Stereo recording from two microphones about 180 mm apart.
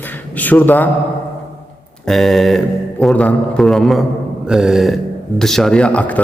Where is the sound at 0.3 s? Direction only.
10° left (ahead or behind).